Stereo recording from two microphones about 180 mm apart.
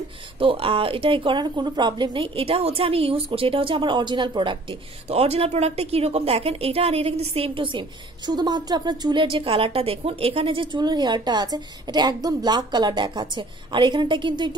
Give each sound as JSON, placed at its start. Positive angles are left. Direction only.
{"t": 0.4, "sound": "a woman's voice", "side_deg": -30}